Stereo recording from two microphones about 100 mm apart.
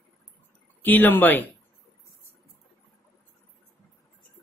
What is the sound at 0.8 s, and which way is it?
Speech, 20° left (ahead or behind).